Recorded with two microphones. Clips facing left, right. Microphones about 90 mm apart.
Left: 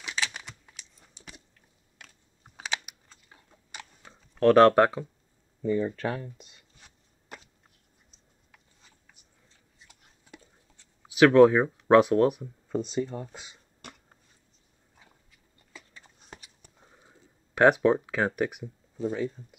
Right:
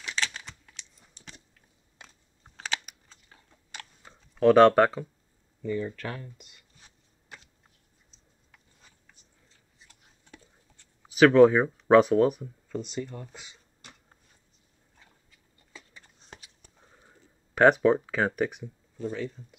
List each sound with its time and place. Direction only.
0.0 s computer keyboard: 10° left (ahead or behind)
2.0 s biting: 25° right (ahead or behind)
2.4 s computer keyboard: 10° left (ahead or behind)
4.1 s a sound: centre (ahead or behind)
5.6 s speech: 25° left (ahead or behind)
9.8 s a sound: 10° left (ahead or behind)
11.1 s speech: centre (ahead or behind)
12.6 s speech: 25° left (ahead or behind)
16.6 s a sound: 5° left (ahead or behind)
17.6 s speech: 5° left (ahead or behind)